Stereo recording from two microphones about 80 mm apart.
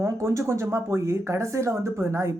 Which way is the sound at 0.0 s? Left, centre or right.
Right.